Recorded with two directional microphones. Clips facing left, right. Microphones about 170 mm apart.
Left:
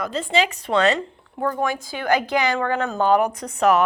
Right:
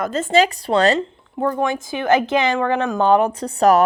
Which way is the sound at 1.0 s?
20° right (ahead or behind).